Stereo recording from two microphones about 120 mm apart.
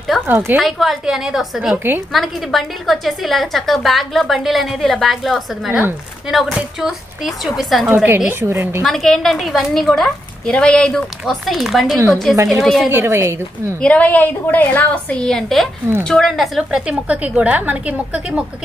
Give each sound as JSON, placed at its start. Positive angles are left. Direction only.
{"t": 0.3, "sound": "a woman's voice", "side_deg": -15}
{"t": 0.6, "sound": "a woman's voice", "side_deg": 0}
{"t": 7.9, "sound": "a woman's voice", "side_deg": -15}
{"t": 8.8, "sound": "a woman's voice", "side_deg": 5}
{"t": 12.9, "sound": "a woman's voice", "side_deg": -20}
{"t": 13.7, "sound": "a woman's voice", "side_deg": 10}